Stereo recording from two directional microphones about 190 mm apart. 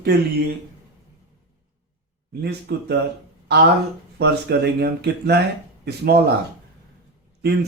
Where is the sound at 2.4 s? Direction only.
60° right (ahead or behind).